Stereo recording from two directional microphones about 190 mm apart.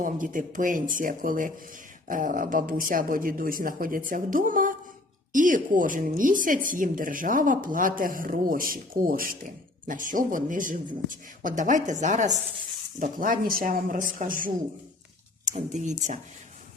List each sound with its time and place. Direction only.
0.0 s speech: 45° right (ahead or behind)